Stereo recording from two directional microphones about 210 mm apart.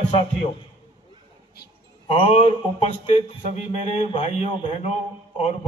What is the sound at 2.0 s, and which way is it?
A man's voice, 30° left (ahead or behind).